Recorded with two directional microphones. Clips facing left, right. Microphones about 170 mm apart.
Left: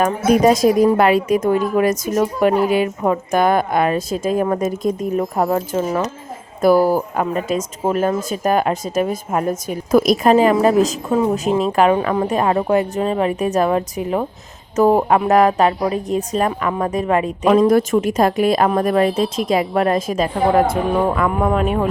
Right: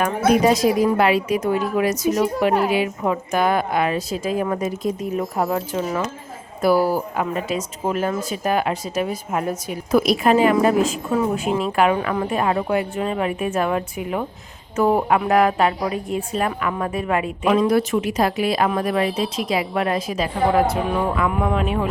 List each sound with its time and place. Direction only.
0.4 s a woman's voice: 45° left (ahead or behind)
19.0 s speech: centre (ahead or behind)
19.5 s speech: 45° left (ahead or behind)